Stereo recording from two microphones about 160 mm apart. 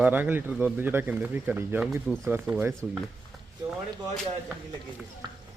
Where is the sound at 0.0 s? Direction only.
10° right (ahead or behind).